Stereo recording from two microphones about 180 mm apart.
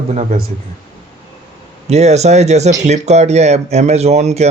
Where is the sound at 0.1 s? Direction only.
40° right (ahead or behind).